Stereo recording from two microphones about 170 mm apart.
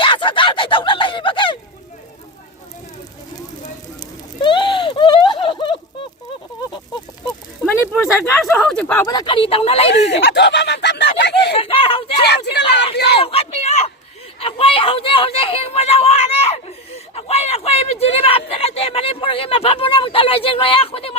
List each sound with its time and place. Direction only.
0.0 s speech: 30° left (ahead or behind)
4.4 s a sound: 30° left (ahead or behind)
7.6 s speech: centre (ahead or behind)
9.0 s speech: 25° left (ahead or behind)
9.9 s speech: 80° left
11.5 s a sound: 35° left (ahead or behind)